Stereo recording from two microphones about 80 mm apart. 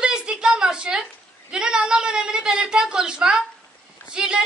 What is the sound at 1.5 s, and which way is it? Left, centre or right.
A woman's voice, centre.